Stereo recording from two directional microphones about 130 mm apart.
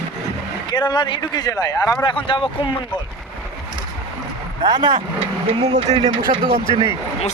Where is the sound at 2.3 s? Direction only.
40° left (ahead or behind).